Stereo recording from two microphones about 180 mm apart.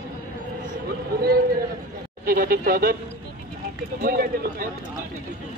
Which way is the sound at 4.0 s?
55° right (ahead or behind).